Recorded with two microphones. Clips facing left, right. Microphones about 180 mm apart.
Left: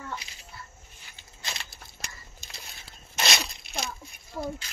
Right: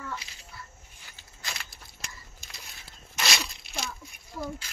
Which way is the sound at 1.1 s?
25° left (ahead or behind).